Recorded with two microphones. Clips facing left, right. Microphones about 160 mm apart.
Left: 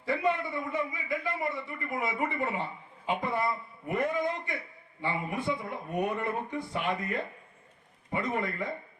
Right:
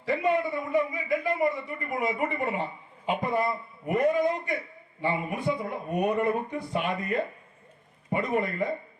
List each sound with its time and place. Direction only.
0.0 s speech: 20° right (ahead or behind)